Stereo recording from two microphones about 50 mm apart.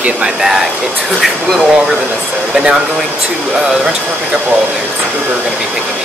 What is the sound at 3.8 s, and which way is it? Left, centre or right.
Speech, right.